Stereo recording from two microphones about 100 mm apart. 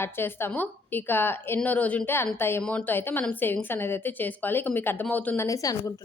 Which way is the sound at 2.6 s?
10° left (ahead or behind).